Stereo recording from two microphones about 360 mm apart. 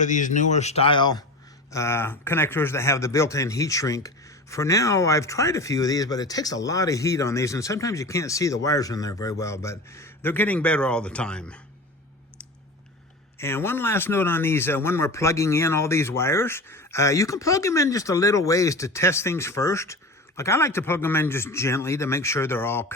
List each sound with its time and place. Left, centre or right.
0.0 s speech: left; by 11.6 s centre
13.4 s speech: centre